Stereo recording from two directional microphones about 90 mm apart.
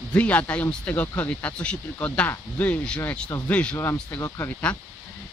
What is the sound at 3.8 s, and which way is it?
Speech, 30° left (ahead or behind).